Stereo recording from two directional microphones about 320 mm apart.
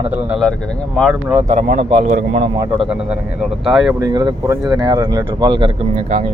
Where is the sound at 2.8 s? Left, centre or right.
Centre.